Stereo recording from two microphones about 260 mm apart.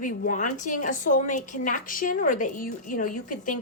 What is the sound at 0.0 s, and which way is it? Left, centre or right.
A woman's voice, left.